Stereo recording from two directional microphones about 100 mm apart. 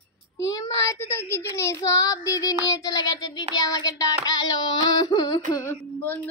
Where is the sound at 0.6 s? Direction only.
25° left (ahead or behind).